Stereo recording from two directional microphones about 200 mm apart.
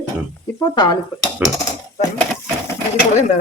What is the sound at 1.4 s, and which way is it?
Speech, 10° right (ahead or behind).